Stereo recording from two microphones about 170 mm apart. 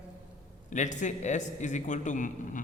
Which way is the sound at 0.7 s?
45° left (ahead or behind).